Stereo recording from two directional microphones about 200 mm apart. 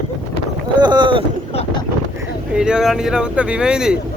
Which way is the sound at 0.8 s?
20° right (ahead or behind).